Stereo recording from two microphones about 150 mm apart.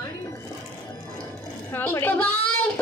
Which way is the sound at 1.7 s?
15° left (ahead or behind).